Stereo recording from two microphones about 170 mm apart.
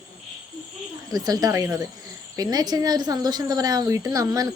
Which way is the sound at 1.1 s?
20° right (ahead or behind).